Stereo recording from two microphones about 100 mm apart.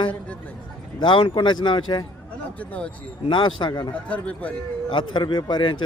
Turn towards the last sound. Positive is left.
turn(degrees=50)  # may be behind; listen again after turning